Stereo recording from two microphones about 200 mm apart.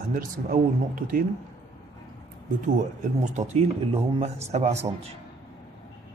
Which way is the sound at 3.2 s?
35° right (ahead or behind).